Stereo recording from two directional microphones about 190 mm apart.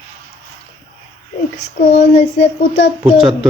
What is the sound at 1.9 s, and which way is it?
Speech, 35° left (ahead or behind).